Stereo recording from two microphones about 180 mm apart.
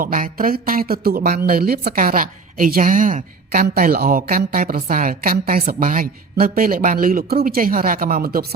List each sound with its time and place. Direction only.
0.0 s speech: 50° right (ahead or behind)